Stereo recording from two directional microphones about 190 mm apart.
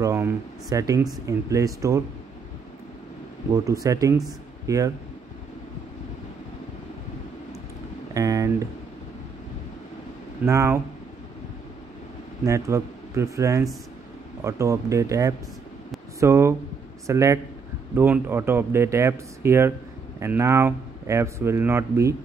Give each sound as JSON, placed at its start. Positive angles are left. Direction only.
{"t": 0.0, "sound": "speech", "side_deg": -15}
{"t": 3.8, "sound": "speech", "side_deg": -15}
{"t": 8.1, "sound": "speech", "side_deg": -15}
{"t": 10.4, "sound": "speech", "side_deg": -15}
{"t": 12.4, "sound": "speech", "side_deg": -15}